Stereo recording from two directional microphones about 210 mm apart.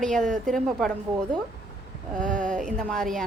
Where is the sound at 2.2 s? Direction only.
40° right (ahead or behind).